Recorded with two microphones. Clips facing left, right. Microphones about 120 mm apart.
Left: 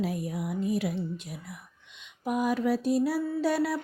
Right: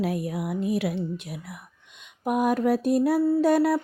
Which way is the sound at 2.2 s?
55° right (ahead or behind).